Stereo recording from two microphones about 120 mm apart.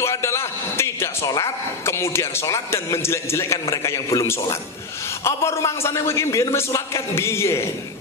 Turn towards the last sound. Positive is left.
turn(degrees=20)  # may be behind; listen again after turning